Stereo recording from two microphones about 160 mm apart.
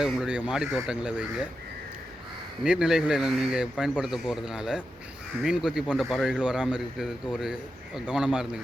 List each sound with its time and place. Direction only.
0.0 s a man's voice: 5° right (ahead or behind)
2.6 s a man's voice: 5° right (ahead or behind)